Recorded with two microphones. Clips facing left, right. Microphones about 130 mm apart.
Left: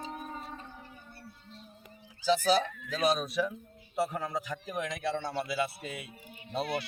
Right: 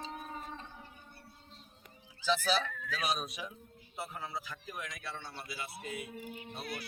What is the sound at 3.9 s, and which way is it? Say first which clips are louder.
A man's voice: left 9 dB; 80° left.